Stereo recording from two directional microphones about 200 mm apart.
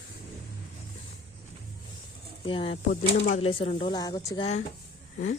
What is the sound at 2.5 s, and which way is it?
Speech, 25° left (ahead or behind).